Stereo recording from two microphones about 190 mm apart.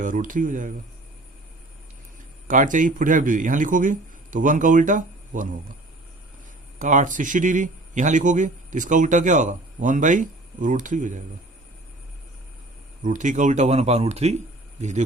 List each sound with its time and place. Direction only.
0.0 s speech: 45° right (ahead or behind)
2.5 s speech: 45° right (ahead or behind)
6.7 s a man's voice: 40° right (ahead or behind)
13.0 s a man's voice: 40° right (ahead or behind)